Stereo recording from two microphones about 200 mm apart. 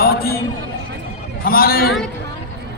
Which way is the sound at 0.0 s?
50° left (ahead or behind).